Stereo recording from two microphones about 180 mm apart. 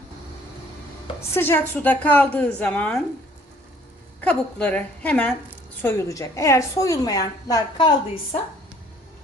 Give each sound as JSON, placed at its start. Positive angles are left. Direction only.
{"t": 1.3, "sound": "a woman's voice", "side_deg": 10}
{"t": 4.2, "sound": "a woman's voice", "side_deg": 5}